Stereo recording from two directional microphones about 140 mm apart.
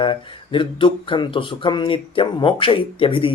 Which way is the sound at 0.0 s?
35° left (ahead or behind).